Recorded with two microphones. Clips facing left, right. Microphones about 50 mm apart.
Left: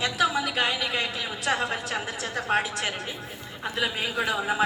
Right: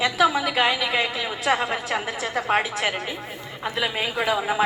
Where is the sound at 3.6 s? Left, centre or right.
Right.